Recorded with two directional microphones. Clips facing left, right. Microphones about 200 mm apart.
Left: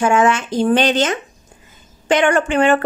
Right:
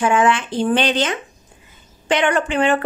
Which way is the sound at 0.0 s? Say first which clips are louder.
Left 2 dB; 45° left (ahead or behind).